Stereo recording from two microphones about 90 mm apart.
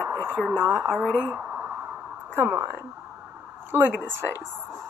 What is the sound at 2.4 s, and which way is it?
Speech, 25° right (ahead or behind).